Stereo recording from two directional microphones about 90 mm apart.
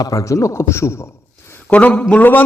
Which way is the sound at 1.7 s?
15° left (ahead or behind).